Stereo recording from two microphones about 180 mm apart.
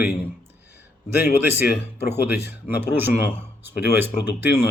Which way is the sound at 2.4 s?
10° right (ahead or behind).